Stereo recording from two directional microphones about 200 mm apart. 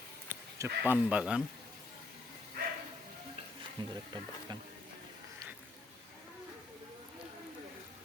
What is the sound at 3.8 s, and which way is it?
Speech, 20° right (ahead or behind).